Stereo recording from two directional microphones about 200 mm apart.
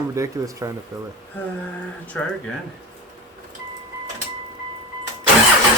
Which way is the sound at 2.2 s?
5° left (ahead or behind).